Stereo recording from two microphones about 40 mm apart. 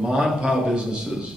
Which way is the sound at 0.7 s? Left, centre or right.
Centre.